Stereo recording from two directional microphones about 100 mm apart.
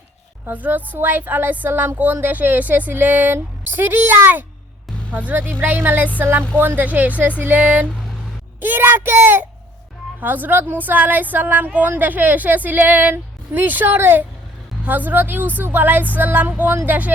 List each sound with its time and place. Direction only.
0.4 s a woman's voice: 20° right (ahead or behind)